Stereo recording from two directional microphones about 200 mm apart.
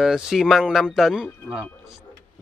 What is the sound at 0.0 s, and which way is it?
Speech, 5° right (ahead or behind).